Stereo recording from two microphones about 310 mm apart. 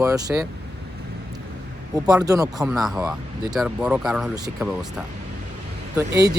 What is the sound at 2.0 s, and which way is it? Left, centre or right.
Speech, centre.